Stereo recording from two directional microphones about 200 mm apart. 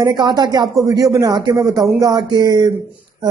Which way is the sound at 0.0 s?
20° right (ahead or behind).